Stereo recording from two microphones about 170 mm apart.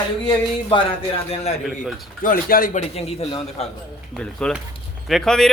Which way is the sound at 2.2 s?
55° left (ahead or behind).